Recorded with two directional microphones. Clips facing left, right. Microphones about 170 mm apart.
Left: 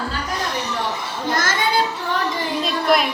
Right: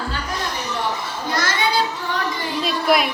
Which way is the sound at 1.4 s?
50° left (ahead or behind).